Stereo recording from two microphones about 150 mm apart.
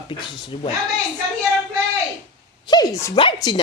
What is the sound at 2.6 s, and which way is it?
Speech, 25° left (ahead or behind).